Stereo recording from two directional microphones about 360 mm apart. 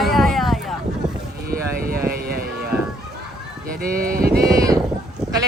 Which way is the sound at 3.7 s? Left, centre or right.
Right.